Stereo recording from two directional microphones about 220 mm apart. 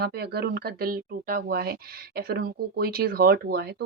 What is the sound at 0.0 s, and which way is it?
Speech, 45° right (ahead or behind).